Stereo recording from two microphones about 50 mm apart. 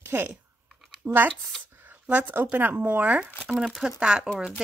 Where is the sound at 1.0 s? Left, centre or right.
Right.